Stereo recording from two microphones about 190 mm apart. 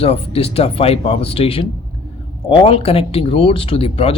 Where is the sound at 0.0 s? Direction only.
30° left (ahead or behind).